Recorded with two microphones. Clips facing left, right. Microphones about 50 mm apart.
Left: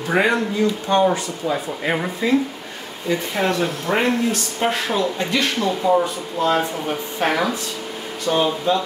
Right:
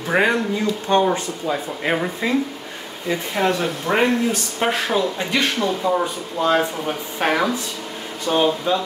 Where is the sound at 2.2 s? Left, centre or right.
Right.